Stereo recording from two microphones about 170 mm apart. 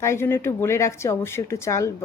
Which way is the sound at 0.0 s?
15° left (ahead or behind).